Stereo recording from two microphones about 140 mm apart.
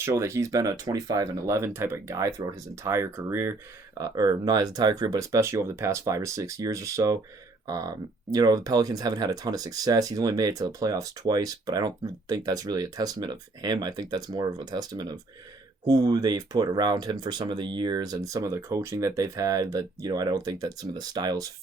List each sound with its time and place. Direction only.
0.0 s speech: 20° right (ahead or behind)